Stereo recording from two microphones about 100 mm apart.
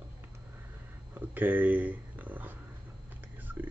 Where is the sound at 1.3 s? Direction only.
15° right (ahead or behind).